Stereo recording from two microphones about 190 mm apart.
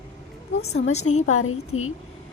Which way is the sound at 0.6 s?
90° left.